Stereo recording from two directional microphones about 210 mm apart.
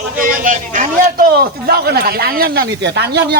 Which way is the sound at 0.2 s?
40° right (ahead or behind).